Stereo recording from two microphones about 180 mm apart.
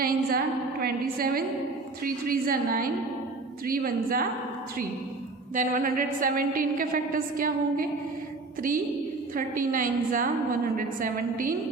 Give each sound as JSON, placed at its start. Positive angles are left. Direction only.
{"t": 0.0, "sound": "a woman's voice", "side_deg": -55}
{"t": 5.5, "sound": "a woman's voice", "side_deg": -50}
{"t": 9.3, "sound": "a woman's voice", "side_deg": -50}